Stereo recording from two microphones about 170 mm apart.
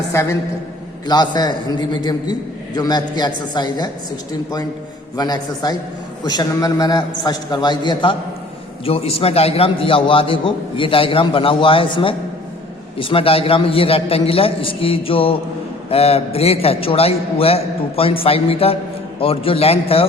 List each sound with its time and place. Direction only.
0.1 s a woman's voice: 15° left (ahead or behind)
5.1 s a man's voice: 25° left (ahead or behind)